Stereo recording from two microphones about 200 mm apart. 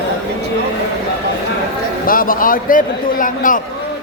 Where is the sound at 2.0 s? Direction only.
45° left (ahead or behind).